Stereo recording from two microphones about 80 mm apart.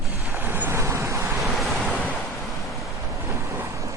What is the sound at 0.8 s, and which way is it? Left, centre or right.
Vehicle, right.